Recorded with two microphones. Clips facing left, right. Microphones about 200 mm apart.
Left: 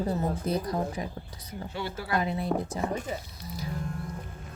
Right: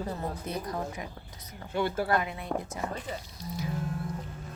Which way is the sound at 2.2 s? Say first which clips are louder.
Left 8 dB; 35° left (ahead or behind).